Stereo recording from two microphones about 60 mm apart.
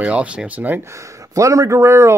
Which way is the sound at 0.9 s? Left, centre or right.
Right.